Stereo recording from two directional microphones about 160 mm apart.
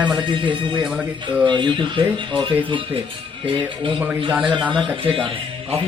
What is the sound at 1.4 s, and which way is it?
Speech, 30° right (ahead or behind).